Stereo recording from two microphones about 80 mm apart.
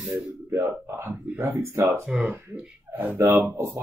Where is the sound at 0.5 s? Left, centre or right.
Right.